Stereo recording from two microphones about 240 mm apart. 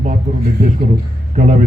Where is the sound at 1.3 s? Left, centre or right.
Right.